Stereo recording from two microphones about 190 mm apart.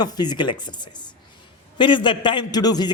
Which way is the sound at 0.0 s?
20° left (ahead or behind).